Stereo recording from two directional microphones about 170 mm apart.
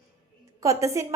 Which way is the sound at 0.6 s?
20° right (ahead or behind).